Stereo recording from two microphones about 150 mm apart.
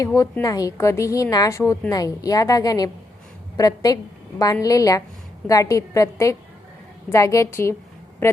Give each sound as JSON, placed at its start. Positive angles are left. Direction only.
{"t": 0.0, "sound": "a woman's voice", "side_deg": 20}